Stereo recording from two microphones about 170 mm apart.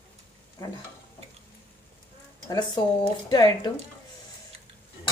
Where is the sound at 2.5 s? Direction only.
25° left (ahead or behind).